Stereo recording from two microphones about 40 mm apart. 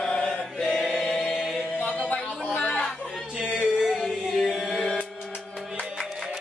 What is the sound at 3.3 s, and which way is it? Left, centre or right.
Yodeling, right.